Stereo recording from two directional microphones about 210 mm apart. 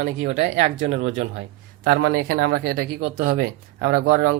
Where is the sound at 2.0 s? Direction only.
45° right (ahead or behind).